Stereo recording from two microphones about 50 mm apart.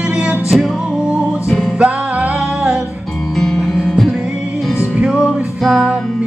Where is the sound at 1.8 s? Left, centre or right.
Right.